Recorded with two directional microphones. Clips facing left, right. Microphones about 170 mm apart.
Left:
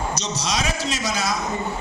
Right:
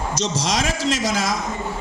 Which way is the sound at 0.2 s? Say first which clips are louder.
Right 3 dB; 90° right.